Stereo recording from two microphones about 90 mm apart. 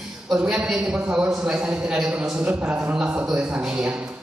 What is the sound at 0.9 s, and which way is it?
A woman's voice, 15° right (ahead or behind).